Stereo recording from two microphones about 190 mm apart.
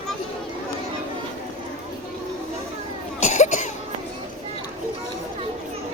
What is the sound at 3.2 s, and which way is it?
Cough, 40° left (ahead or behind).